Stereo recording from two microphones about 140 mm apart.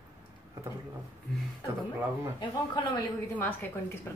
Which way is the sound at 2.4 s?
35° left (ahead or behind).